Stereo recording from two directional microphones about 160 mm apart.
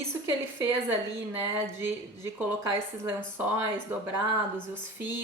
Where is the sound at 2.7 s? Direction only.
15° right (ahead or behind).